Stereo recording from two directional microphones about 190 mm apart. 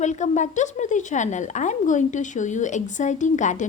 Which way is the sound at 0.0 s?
40° left (ahead or behind).